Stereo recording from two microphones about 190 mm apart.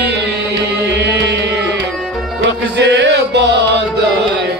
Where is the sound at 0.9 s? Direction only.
65° right (ahead or behind).